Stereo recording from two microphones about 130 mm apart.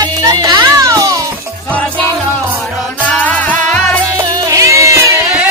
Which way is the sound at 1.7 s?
10° left (ahead or behind).